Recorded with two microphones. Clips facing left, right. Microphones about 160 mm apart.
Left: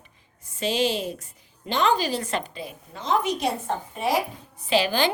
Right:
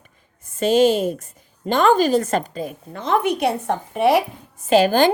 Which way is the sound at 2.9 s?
55° right (ahead or behind).